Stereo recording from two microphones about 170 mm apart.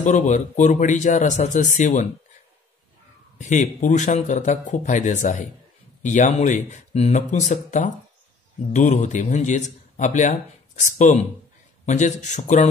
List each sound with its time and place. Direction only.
0.0 s speech: 45° left (ahead or behind)
3.3 s speech: 45° left (ahead or behind)